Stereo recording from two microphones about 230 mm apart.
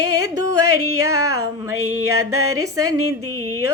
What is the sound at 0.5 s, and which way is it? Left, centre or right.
Music, right.